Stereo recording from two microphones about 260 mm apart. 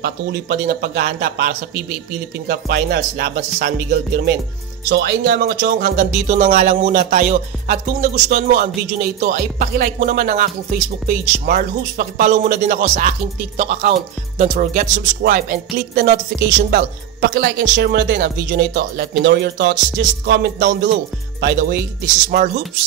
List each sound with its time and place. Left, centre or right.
0.0 s speech: right
4.8 s speech: right
13.6 s music: right
14.4 s speech: right